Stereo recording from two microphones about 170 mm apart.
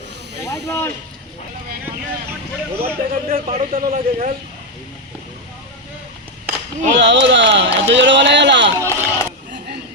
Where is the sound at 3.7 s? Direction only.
55° right (ahead or behind).